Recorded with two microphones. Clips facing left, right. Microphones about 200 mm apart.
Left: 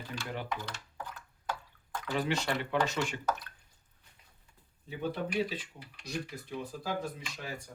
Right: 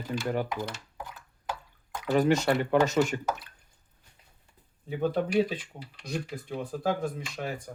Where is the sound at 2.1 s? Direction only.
45° right (ahead or behind).